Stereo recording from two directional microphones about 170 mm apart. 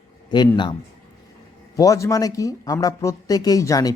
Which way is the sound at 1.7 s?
20° left (ahead or behind).